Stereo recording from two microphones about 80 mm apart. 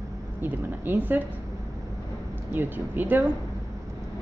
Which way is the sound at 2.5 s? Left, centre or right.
Right.